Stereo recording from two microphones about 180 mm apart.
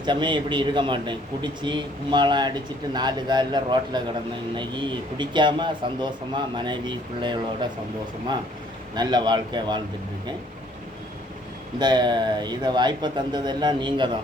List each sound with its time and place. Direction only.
0.0 s a man's voice: 25° right (ahead or behind)
9.0 s a man's voice: 25° right (ahead or behind)
11.8 s a man's voice: 25° right (ahead or behind)